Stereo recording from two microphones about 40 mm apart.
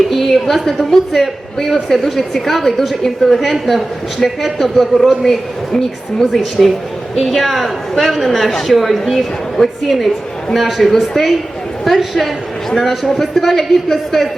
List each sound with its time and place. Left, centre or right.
0.1 s a woman's voice: centre